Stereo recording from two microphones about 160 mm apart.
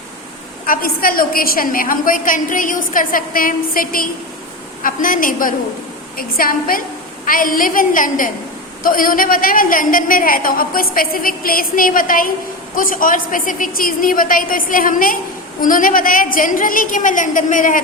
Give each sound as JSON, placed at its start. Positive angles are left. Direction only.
{"t": 0.6, "sound": "a woman's voice", "side_deg": 65}